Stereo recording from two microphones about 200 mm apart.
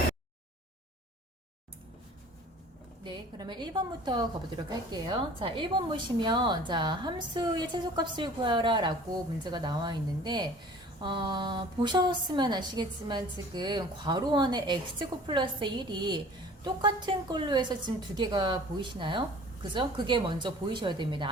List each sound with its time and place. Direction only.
3.0 s a woman's voice: 20° right (ahead or behind)